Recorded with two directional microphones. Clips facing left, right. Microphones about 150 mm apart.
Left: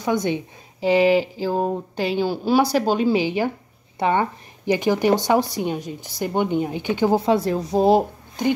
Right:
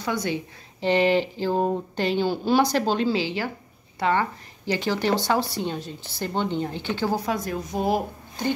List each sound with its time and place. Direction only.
0.0 s a woman's voice: 20° left (ahead or behind)
0.7 s speech: 5° left (ahead or behind); by 8.0 s 30° left (ahead or behind)